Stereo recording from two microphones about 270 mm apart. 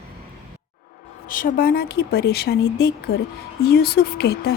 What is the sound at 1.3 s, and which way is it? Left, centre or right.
Speech, left.